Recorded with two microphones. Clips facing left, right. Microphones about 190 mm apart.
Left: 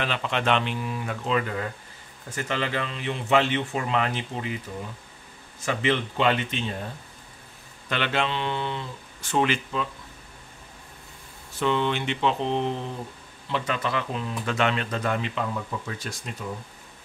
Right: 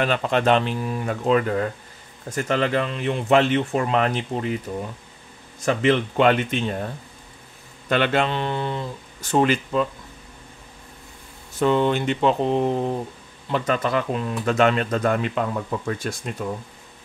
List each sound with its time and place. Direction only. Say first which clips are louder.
0.0 s speech: right 6 dB; 45° right (ahead or behind)
5.7 s speech: right 6 dB; 45° right (ahead or behind)
7.9 s speech: right 6 dB; 45° right (ahead or behind)
11.6 s speech: right 5 dB; 45° right (ahead or behind)